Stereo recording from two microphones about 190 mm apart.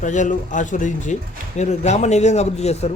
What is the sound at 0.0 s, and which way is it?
Speech, 40° left (ahead or behind).